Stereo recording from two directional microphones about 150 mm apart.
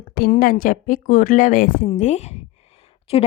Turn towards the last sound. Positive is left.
turn(degrees=40)  # may be behind; listen again after turning